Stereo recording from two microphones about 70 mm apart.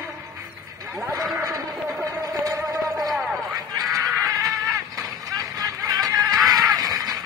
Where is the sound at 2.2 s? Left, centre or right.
Right.